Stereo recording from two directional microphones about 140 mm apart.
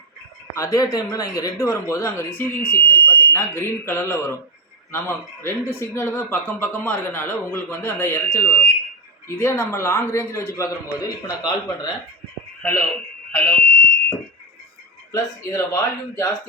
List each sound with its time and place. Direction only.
0.5 s speech: 25° left (ahead or behind)
12.6 s speech: 15° left (ahead or behind)
15.1 s speech: 20° left (ahead or behind)